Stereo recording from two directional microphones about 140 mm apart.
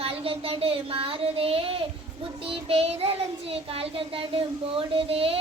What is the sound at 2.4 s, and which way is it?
Child singing, 40° right (ahead or behind).